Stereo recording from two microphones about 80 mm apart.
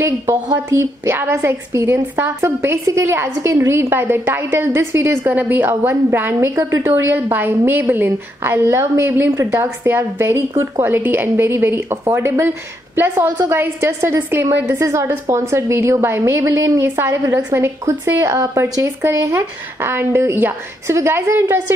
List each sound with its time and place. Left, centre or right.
0.7 s a woman's voice: right
16.8 s a woman's voice: right